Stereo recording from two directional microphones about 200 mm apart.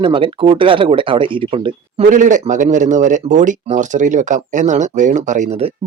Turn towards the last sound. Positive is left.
turn(degrees=-35)  # may be behind; listen again after turning